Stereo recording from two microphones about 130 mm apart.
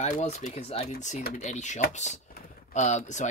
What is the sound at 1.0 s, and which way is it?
Speech, 65° left (ahead or behind).